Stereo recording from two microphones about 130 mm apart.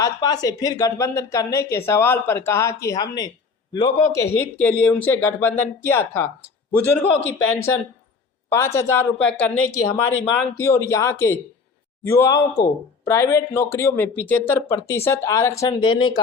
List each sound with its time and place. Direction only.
0.0 s speech: 30° left (ahead or behind)
4.5 s speech: 10° left (ahead or behind)
9.1 s speech: 10° left (ahead or behind)
15.8 s speech: 35° left (ahead or behind)